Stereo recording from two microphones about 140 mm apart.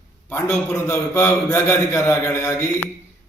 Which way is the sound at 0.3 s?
20° left (ahead or behind).